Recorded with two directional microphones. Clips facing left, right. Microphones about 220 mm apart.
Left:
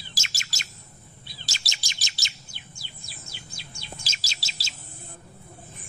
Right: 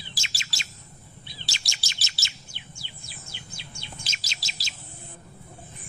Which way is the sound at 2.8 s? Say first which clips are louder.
Right 1 dB; 40° left (ahead or behind).